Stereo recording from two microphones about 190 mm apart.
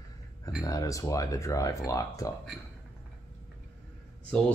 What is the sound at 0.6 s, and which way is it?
Speech, 15° left (ahead or behind).